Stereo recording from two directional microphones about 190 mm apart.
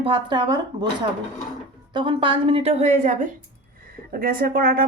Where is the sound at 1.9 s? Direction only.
25° right (ahead or behind); by 4.9 s 50° right (ahead or behind).